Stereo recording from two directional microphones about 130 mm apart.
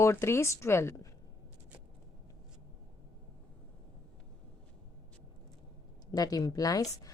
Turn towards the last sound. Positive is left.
turn(degrees=30)  # may be behind; listen again after turning